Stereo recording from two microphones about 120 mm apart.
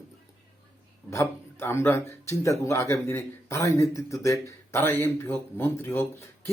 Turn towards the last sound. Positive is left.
turn(degrees=20)  # may be behind; listen again after turning